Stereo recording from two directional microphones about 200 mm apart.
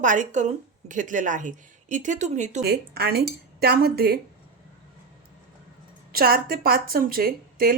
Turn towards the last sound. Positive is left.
turn(degrees=-45)  # may be behind; listen again after turning